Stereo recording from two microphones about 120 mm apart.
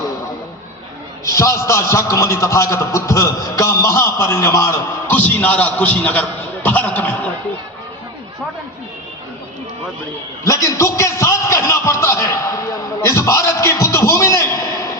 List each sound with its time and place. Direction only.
1.2 s a man's voice: 25° left (ahead or behind)
10.4 s a man's voice: 25° left (ahead or behind)